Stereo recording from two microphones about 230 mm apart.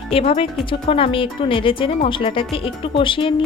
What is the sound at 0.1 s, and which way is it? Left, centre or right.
Speech, left.